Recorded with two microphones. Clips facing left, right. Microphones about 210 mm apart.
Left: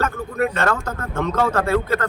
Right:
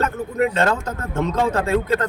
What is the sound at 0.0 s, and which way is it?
A man's voice, 20° right (ahead or behind).